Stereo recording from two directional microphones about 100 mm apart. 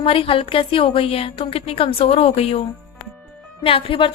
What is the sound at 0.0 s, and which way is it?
A woman's voice, 70° left (ahead or behind).